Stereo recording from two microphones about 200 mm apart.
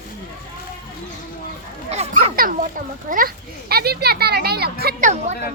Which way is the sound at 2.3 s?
45° right (ahead or behind).